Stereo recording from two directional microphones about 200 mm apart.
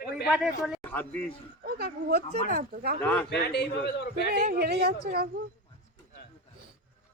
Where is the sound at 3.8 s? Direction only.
55° left (ahead or behind).